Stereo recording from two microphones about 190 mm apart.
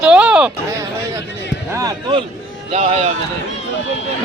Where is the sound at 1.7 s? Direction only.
20° right (ahead or behind).